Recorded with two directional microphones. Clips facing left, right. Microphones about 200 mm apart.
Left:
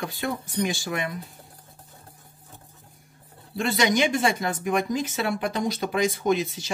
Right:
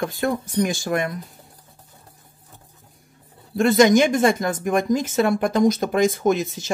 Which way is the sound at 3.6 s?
45° right (ahead or behind).